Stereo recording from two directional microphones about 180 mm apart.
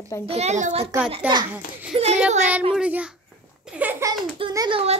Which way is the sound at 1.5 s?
10° right (ahead or behind).